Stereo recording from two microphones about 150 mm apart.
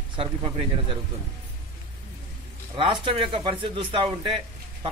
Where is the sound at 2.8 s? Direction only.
35° right (ahead or behind).